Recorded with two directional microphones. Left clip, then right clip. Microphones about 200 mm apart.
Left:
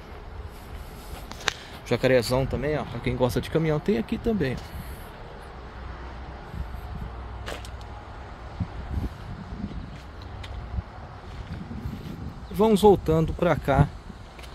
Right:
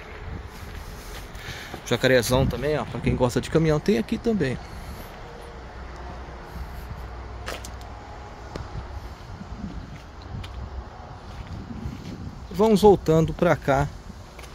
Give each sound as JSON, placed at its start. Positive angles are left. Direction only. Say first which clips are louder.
{"t": 1.9, "sound": "speech", "louder": "right 1 dB", "side_deg": -5}
{"t": 2.3, "sound": "speech", "louder": "right 3 dB", "side_deg": -25}
{"t": 12.5, "sound": "speech", "louder": "right 2 dB", "side_deg": -5}